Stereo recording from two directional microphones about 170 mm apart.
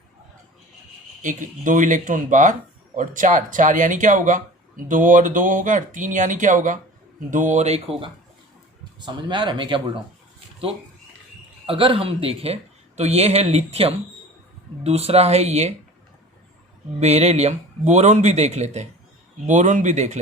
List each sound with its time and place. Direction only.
1.2 s speech: 50° right (ahead or behind)
8.8 s speech: 25° right (ahead or behind)
11.6 s speech: 35° right (ahead or behind)
17.0 s speech: 40° right (ahead or behind)